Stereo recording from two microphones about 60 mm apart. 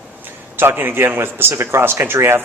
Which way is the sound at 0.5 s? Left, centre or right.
Right.